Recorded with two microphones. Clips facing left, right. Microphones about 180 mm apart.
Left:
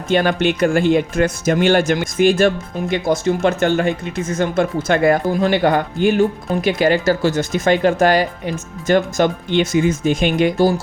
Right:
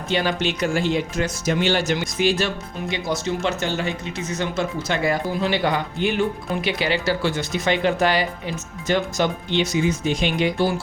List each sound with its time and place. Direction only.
0.1 s speech: 55° left (ahead or behind)